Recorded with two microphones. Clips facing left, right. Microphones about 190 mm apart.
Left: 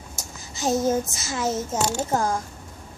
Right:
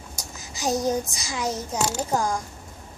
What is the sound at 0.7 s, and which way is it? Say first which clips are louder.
A child's voice: left 2 dB; centre (ahead or behind).